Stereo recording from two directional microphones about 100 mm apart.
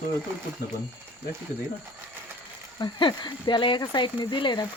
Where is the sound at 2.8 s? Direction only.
50° left (ahead or behind).